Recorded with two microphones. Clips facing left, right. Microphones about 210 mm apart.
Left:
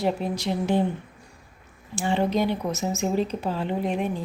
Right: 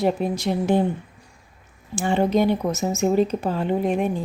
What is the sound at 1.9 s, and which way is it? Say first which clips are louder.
A woman's voice: right 4 dB; 50° right (ahead or behind).